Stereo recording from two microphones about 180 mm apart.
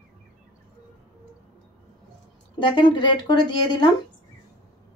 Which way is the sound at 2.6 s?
25° left (ahead or behind).